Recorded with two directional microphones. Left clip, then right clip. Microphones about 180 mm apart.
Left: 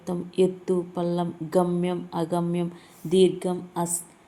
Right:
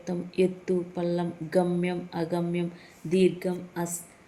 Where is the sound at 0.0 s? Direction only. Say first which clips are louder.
Left 3 dB; 25° left (ahead or behind).